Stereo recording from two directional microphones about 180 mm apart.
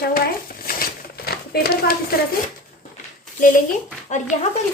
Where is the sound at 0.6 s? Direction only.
55° left (ahead or behind).